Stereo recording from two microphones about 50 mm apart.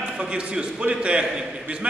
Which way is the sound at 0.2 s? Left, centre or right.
Centre.